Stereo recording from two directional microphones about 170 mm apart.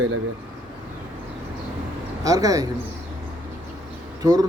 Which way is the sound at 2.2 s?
20° right (ahead or behind).